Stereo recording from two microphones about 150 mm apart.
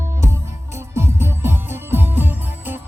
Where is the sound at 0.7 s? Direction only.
15° right (ahead or behind).